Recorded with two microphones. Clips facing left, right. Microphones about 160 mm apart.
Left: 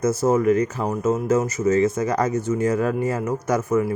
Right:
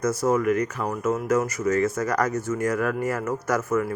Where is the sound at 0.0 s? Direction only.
25° left (ahead or behind).